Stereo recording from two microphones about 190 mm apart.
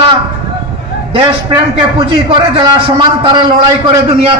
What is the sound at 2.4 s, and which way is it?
A man's voice, 25° right (ahead or behind).